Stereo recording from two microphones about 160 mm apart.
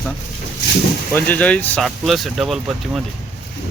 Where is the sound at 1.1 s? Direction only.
10° left (ahead or behind).